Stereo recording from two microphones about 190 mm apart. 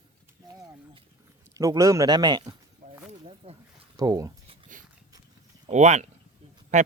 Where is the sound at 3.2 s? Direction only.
30° right (ahead or behind).